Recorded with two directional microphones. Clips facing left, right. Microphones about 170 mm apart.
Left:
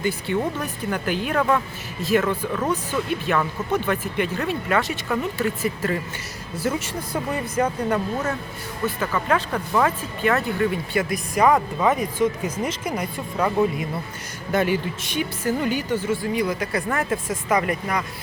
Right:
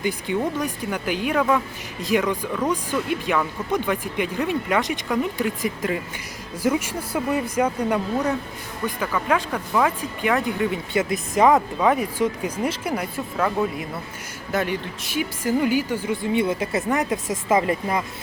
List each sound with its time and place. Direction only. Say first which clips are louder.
0.0 s speech: even; 15° right (ahead or behind)
11.4 s speech: right 1 dB; 5° right (ahead or behind)
14.5 s speech: left 3 dB; centre (ahead or behind); by 18.0 s 25° right (ahead or behind)